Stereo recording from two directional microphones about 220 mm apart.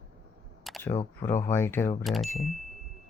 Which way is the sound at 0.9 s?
10° left (ahead or behind).